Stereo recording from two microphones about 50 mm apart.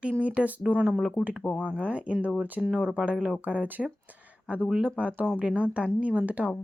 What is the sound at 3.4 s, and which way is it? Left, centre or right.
Speech, right.